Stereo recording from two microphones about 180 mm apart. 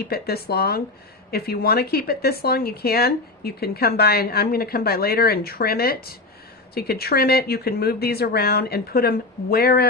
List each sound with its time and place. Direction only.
0.0 s speech: 60° left (ahead or behind)